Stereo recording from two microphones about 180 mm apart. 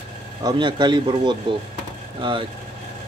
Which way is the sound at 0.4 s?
25° right (ahead or behind).